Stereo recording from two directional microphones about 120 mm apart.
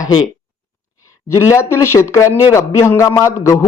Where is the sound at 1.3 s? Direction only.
25° left (ahead or behind).